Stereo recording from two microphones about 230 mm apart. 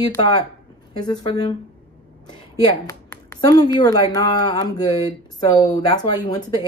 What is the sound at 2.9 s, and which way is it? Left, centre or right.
Speech, centre.